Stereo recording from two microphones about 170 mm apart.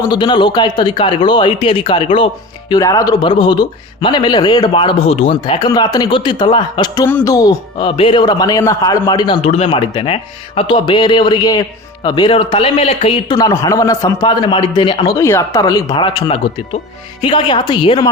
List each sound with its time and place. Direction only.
0.1 s speech: 25° left (ahead or behind)